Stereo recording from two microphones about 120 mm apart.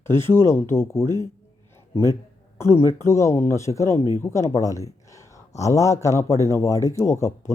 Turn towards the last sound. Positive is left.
turn(degrees=25)  # may be behind; listen again after turning